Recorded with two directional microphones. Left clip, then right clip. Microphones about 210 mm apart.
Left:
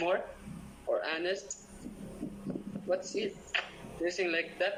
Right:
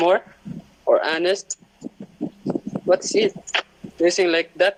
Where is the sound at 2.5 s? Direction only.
45° right (ahead or behind).